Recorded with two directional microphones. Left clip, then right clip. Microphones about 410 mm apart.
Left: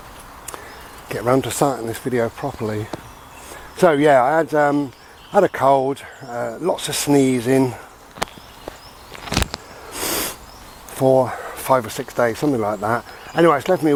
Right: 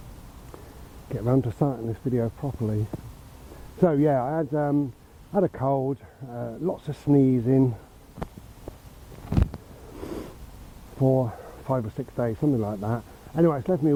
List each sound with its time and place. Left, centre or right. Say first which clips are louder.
1.0 s speech: left 8 dB; centre
9.2 s a sound: left 9 dB; centre
10.9 s speech: left 9 dB; centre